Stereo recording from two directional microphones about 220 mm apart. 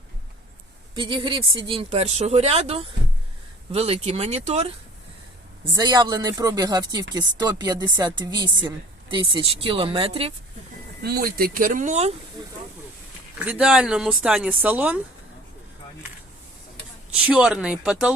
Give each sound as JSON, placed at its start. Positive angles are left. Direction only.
{"t": 0.9, "sound": "a woman's voice", "side_deg": -20}
{"t": 5.7, "sound": "a woman's voice", "side_deg": -20}
{"t": 11.0, "sound": "speech", "side_deg": -45}
{"t": 13.4, "sound": "speech", "side_deg": -5}
{"t": 17.1, "sound": "speech", "side_deg": -5}